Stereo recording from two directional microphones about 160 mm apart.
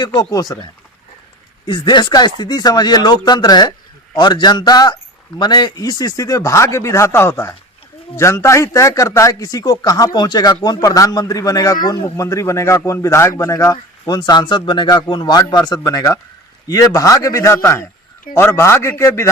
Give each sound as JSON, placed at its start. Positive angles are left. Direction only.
{"t": 0.0, "sound": "a man's voice", "side_deg": 25}